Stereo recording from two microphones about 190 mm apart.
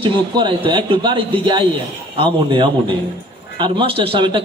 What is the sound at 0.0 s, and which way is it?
Speech, 25° right (ahead or behind).